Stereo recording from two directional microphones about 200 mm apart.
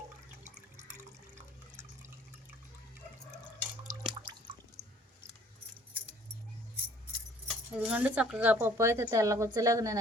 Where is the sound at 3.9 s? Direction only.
20° right (ahead or behind).